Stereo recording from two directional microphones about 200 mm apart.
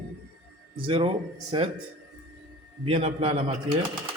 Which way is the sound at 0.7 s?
25° right (ahead or behind).